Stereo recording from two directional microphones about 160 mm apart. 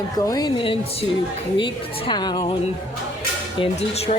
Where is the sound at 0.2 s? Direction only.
25° left (ahead or behind).